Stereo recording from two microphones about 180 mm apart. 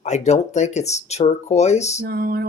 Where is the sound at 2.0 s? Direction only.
60° right (ahead or behind).